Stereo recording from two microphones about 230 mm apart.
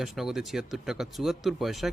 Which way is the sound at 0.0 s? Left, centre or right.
Centre.